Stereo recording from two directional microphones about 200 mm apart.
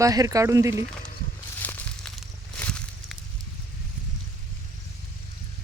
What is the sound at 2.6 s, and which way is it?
Snake, 5° left (ahead or behind).